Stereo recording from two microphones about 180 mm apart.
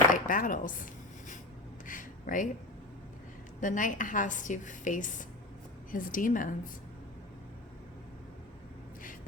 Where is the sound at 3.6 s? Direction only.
45° left (ahead or behind).